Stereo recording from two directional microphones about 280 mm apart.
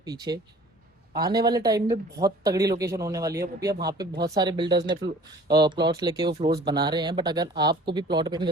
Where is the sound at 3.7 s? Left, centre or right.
Right.